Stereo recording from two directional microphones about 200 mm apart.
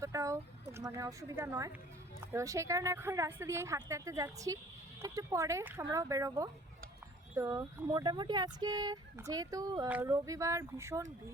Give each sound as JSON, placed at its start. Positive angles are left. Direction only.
{"t": 0.0, "sound": "speech", "side_deg": -15}